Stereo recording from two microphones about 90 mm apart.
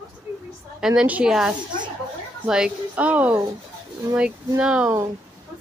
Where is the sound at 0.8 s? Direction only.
5° right (ahead or behind).